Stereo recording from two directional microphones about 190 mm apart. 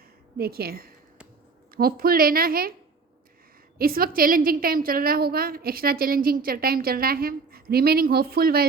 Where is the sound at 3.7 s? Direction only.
50° right (ahead or behind).